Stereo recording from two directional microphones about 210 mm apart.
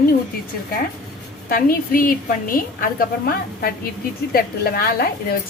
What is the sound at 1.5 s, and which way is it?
A woman's voice, 40° left (ahead or behind).